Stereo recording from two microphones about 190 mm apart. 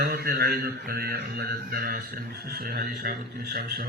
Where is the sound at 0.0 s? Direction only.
55° right (ahead or behind).